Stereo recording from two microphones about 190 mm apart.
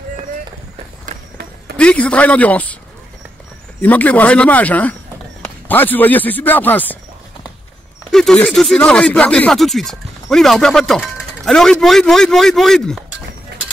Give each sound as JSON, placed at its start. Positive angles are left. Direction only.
{"t": 1.8, "sound": "speech", "side_deg": 5}
{"t": 3.8, "sound": "a man's voice", "side_deg": 10}
{"t": 8.1, "sound": "speech", "side_deg": 0}